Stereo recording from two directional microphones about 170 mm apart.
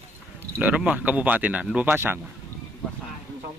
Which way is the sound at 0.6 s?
5° right (ahead or behind).